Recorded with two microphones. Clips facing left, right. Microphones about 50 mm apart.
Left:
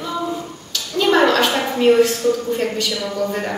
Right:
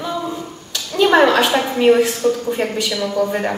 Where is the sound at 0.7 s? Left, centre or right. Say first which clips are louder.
Right 3 dB; centre.